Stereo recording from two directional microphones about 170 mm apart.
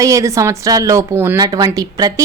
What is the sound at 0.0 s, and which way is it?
Speech, 20° right (ahead or behind).